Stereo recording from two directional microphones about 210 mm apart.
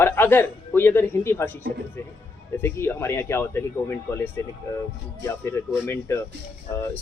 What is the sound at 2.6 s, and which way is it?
Speech, 10° left (ahead or behind).